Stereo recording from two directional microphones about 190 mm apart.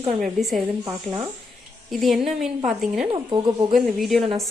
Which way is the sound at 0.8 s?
15° right (ahead or behind).